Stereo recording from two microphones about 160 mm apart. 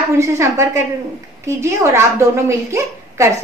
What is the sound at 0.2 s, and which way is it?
A woman's voice, 15° right (ahead or behind).